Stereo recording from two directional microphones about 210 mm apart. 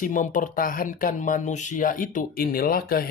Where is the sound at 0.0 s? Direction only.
40° left (ahead or behind).